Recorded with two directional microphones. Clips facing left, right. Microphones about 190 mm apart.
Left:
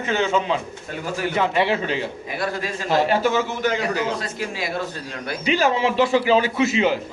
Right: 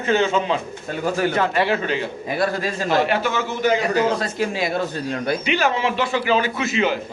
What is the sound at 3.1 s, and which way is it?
Speech, 40° left (ahead or behind).